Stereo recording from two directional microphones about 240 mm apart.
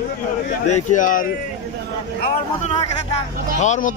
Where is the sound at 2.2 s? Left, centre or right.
Left.